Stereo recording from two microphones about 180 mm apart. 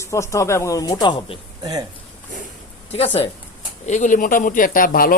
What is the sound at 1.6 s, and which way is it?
Speech, 20° right (ahead or behind).